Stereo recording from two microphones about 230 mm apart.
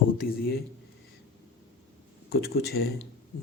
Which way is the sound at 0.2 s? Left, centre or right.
Left.